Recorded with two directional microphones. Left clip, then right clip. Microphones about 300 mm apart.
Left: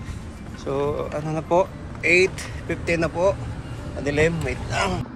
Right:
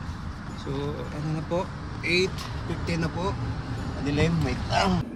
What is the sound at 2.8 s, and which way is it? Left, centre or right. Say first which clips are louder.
Speech: left 10 dB; centre.